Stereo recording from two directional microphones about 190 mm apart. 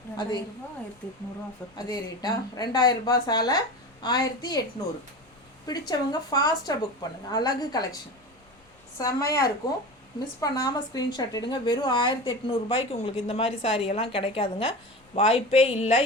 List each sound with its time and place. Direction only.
0.2 s a woman's voice: 20° left (ahead or behind)
1.7 s a woman's voice: 20° left (ahead or behind)
5.6 s a woman's voice: 20° left (ahead or behind)
9.0 s a woman's voice: 20° left (ahead or behind)